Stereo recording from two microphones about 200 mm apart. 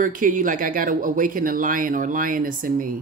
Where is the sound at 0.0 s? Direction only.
40° right (ahead or behind).